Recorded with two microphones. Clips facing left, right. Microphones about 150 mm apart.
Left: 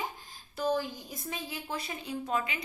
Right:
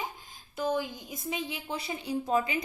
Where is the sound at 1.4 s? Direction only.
25° right (ahead or behind).